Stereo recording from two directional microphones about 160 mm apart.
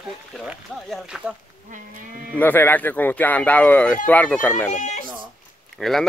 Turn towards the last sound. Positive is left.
turn(degrees=0)  # may be behind; listen again after turning